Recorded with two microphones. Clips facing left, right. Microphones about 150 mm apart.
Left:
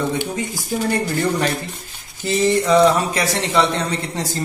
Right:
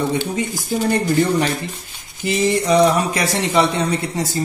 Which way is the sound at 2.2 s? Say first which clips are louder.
Left 1 dB; 15° right (ahead or behind).